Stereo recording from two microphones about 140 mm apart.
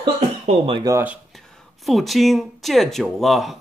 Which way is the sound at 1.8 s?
Centre (ahead or behind).